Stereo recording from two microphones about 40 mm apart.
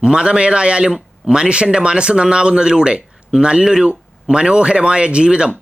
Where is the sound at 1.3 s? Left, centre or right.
Right.